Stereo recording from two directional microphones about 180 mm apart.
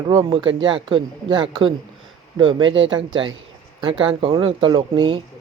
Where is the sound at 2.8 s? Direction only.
25° right (ahead or behind).